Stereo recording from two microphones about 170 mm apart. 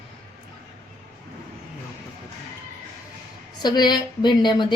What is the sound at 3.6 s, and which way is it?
A woman's voice, 25° left (ahead or behind).